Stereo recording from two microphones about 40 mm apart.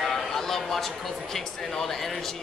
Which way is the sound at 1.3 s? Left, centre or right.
Centre.